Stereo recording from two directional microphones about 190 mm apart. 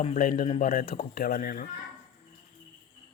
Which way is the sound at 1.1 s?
50° left (ahead or behind).